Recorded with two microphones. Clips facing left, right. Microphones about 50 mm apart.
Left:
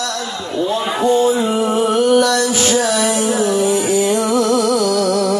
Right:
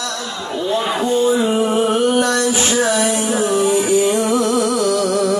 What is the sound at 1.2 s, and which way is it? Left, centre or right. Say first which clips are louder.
Music: even; centre.